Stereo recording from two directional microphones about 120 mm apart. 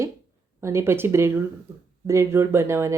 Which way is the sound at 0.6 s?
20° right (ahead or behind).